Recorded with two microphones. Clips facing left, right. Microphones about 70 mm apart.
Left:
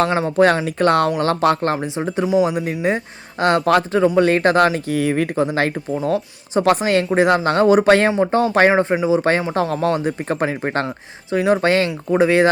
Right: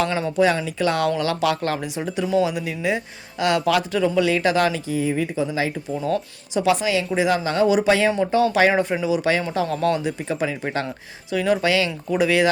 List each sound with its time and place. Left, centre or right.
0.2 s speech: left
4.9 s speech: left
5.9 s speech: left
6.7 s speech: left
8.7 s speech: left
11.3 s speech: left